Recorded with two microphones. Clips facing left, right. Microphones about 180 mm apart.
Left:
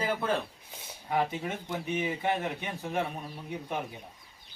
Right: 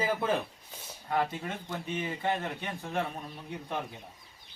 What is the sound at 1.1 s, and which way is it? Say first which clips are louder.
Speech: left 1 dB; 15° left (ahead or behind).